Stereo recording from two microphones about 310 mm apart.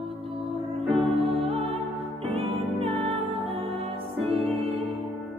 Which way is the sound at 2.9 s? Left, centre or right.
Centre.